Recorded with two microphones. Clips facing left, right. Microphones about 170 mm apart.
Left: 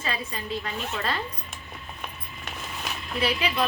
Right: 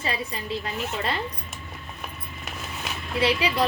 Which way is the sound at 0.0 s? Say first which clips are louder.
Right 2 dB; 30° right (ahead or behind).